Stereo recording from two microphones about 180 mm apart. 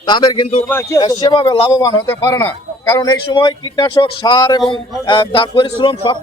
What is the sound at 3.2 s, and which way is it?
A man's voice, 25° left (ahead or behind).